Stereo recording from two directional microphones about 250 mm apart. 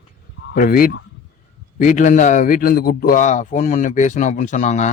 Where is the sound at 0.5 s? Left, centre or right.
Left.